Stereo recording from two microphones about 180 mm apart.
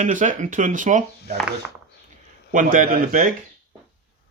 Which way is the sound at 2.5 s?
45° right (ahead or behind).